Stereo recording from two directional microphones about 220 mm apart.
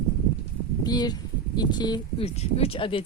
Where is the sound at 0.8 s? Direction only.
20° left (ahead or behind).